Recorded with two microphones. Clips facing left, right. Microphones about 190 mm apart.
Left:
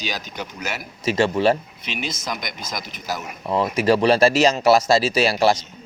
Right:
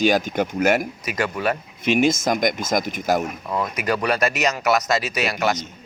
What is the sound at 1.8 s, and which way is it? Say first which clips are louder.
A man's voice: right 13 dB; 50° right (ahead or behind).